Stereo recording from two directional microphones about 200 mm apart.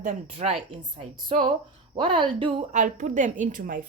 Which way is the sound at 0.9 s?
25° right (ahead or behind).